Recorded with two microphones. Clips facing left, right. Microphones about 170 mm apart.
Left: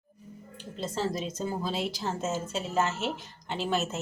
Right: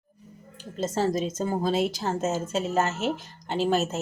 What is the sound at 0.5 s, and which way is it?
A woman's voice, 45° right (ahead or behind).